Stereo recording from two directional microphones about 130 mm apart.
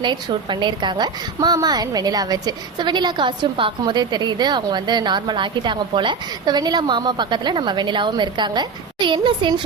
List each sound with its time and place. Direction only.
0.0 s a woman's voice: 35° right (ahead or behind)